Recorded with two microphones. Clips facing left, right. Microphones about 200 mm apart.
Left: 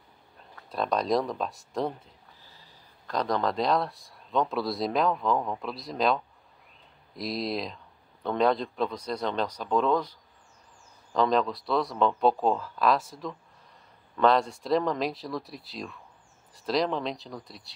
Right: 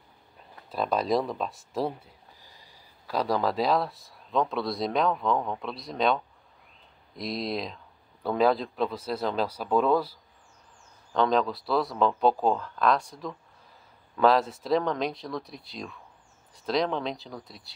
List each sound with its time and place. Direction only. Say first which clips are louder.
0.7 s speech: even; 5° right (ahead or behind)
11.1 s speech: even; centre (ahead or behind)